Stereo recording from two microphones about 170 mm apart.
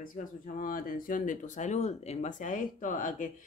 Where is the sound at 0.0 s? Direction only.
50° left (ahead or behind).